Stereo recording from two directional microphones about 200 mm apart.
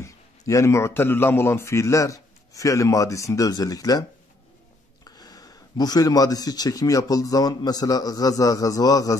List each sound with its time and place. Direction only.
0.0 s speech: 15° left (ahead or behind)
5.0 s speech: 20° left (ahead or behind)